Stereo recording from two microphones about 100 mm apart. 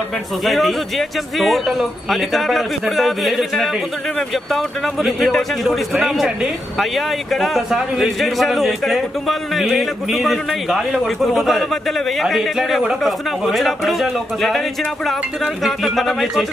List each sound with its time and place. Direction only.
0.5 s a man's voice: centre (ahead or behind)